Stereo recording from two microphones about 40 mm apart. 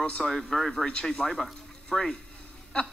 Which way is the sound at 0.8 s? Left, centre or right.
Left.